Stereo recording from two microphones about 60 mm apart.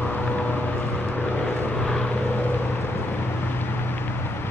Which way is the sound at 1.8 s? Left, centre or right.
Centre.